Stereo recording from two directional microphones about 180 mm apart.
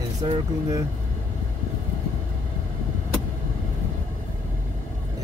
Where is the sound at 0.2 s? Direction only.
25° right (ahead or behind).